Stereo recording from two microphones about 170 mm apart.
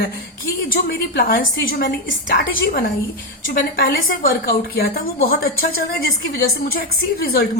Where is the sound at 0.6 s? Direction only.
55° left (ahead or behind).